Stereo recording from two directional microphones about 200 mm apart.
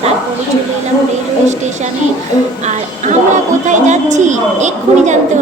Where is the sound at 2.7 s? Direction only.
35° right (ahead or behind).